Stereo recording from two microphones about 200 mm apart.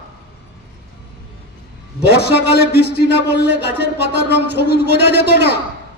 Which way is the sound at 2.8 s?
60° right (ahead or behind).